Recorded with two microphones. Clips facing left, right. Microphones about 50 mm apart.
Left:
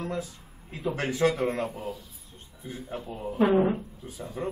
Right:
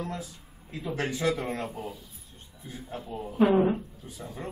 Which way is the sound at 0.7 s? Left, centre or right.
Left.